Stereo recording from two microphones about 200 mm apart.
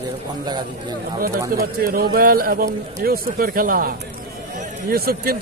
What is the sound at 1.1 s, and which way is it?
Speech, 45° right (ahead or behind).